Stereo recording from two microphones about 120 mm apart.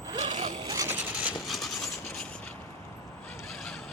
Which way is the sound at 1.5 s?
Centre (ahead or behind).